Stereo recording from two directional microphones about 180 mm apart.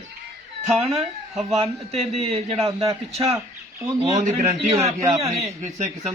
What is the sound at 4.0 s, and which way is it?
Speech, 40° right (ahead or behind).